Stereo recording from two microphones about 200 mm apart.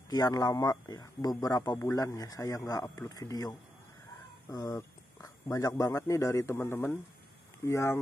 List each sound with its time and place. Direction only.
0.1 s speech: 20° left (ahead or behind)